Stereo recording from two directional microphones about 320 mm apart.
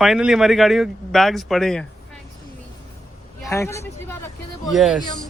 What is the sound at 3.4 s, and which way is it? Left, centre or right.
Speech, centre.